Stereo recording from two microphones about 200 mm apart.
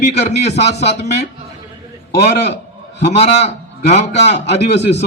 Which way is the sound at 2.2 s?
60° left (ahead or behind).